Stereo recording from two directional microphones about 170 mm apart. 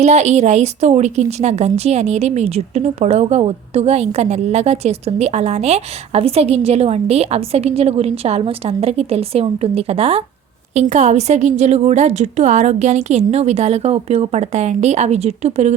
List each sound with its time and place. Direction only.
0.0 s a woman's voice: 40° right (ahead or behind)